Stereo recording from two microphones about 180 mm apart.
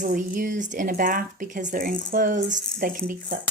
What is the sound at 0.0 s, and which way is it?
A woman's voice, 50° right (ahead or behind).